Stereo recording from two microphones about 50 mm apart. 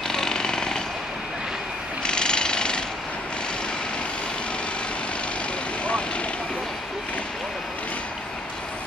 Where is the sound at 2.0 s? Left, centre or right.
Centre.